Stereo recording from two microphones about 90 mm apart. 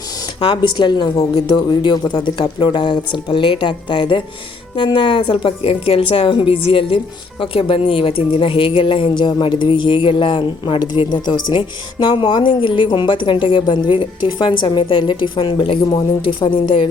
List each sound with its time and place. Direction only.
0.3 s speech: 60° left (ahead or behind); by 1.3 s 45° left (ahead or behind)
1.5 s a woman's voice: 60° left (ahead or behind); by 16.9 s 80° left